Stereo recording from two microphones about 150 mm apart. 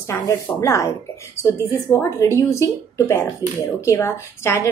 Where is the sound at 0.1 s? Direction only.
20° left (ahead or behind).